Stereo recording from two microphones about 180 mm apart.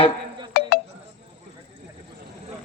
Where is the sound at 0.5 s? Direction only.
55° left (ahead or behind).